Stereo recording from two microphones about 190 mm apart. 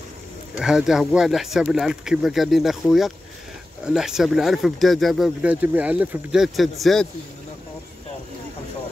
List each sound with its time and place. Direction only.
0.6 s speech: 5° right (ahead or behind)